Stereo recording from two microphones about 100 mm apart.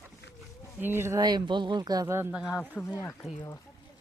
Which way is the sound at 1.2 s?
45° right (ahead or behind).